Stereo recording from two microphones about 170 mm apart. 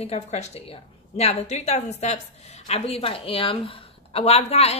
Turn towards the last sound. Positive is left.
turn(degrees=35)  # may be behind; listen again after turning